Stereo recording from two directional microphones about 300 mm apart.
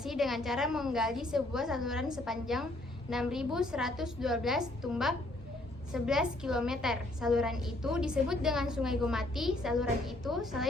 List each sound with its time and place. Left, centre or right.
0.0 s a woman's voice: centre